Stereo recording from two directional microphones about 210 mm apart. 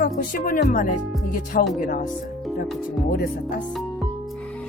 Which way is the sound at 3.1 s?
45° left (ahead or behind).